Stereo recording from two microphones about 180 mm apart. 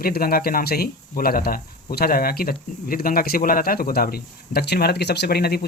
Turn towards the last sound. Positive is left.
turn(degrees=60)  # may be behind; listen again after turning